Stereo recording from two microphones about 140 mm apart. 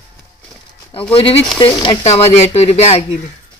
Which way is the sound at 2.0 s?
45° left (ahead or behind).